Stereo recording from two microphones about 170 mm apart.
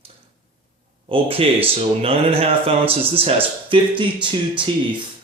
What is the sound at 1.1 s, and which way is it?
Speech, 35° right (ahead or behind).